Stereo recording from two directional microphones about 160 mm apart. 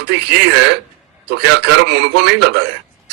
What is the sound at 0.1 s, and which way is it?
A man's voice, 90° right.